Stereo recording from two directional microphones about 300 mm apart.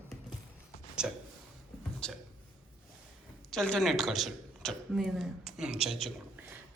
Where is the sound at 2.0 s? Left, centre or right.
Centre.